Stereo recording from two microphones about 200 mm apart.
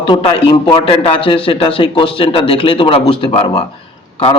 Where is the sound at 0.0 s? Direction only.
25° left (ahead or behind).